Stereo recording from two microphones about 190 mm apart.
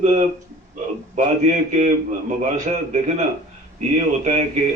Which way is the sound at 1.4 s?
40° right (ahead or behind).